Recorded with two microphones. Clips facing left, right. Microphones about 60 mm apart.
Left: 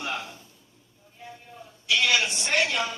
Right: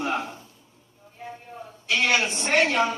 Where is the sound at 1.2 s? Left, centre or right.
Right.